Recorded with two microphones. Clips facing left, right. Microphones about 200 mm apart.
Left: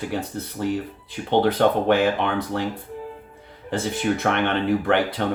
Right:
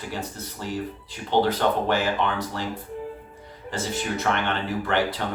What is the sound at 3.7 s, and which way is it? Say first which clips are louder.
Speech: left 5 dB; 55° left (ahead or behind).